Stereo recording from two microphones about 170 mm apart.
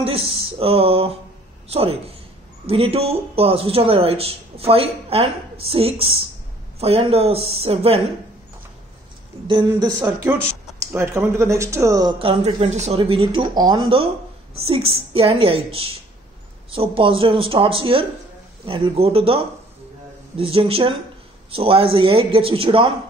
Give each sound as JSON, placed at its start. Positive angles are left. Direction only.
{"t": 0.0, "sound": "speech", "side_deg": -35}
{"t": 9.5, "sound": "speech", "side_deg": -25}